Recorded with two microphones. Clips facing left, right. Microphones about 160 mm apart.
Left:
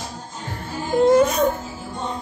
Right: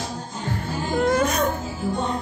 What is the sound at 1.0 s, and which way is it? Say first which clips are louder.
Whimper: left 7 dB; 25° left (ahead or behind).